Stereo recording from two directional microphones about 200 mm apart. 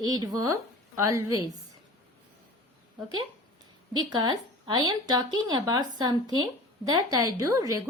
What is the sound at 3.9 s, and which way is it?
A woman's voice, 20° right (ahead or behind).